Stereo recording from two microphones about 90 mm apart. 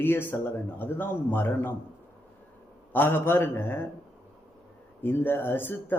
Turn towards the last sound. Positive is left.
turn(degrees=20)  # may be behind; listen again after turning